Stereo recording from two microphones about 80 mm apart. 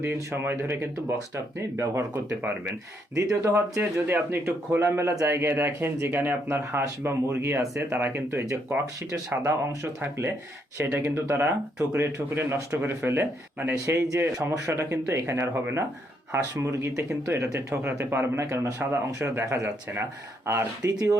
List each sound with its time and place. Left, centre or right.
0.0 s speech: right
3.4 s speech: right
7.9 s speech: right
8.3 s speech: right